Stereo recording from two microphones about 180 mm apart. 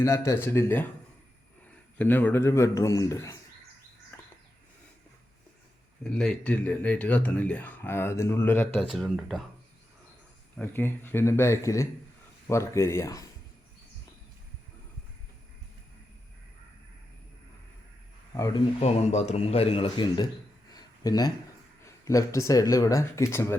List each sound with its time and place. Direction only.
0.0 s a man's voice: 15° left (ahead or behind)
4.1 s bird: 10° left (ahead or behind)
6.1 s speech: 5° left (ahead or behind)
8.8 s speech: centre (ahead or behind)
10.6 s speech: 10° left (ahead or behind)
18.3 s speech: 20° left (ahead or behind)
18.8 s speech: 40° left (ahead or behind)
20.7 s a sound: 20° left (ahead or behind)
21.8 s speech: 15° left (ahead or behind)